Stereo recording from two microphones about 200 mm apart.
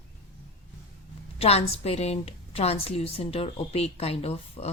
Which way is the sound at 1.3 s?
30° left (ahead or behind).